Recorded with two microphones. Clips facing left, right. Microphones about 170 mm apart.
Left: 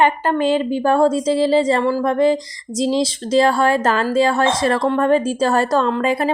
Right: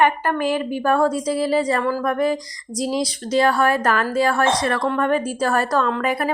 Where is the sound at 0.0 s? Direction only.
25° left (ahead or behind).